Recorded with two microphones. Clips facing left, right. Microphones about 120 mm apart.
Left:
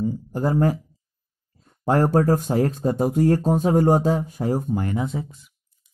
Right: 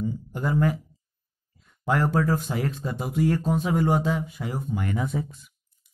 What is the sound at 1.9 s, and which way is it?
Speech, 40° left (ahead or behind).